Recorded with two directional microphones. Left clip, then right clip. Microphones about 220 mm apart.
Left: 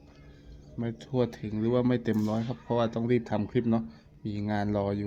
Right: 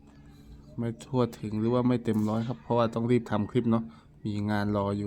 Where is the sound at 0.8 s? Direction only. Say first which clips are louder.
Even; 15° right (ahead or behind).